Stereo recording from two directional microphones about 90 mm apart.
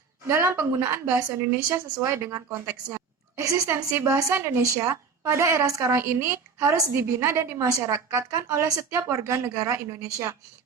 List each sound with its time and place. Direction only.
0.3 s a woman's voice: 30° right (ahead or behind)